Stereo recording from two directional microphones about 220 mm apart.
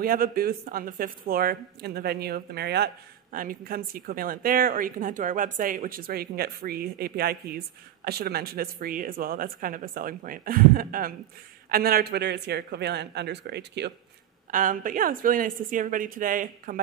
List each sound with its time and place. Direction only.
0.0 s speech: 40° right (ahead or behind)
14.5 s speech: 40° right (ahead or behind)